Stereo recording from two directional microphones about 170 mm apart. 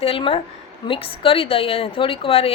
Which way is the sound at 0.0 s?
35° left (ahead or behind).